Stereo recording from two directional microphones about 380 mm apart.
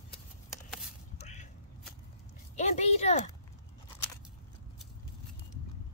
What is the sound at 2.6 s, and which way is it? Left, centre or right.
Speech, centre.